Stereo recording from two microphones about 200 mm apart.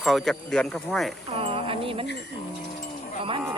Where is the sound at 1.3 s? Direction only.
25° right (ahead or behind).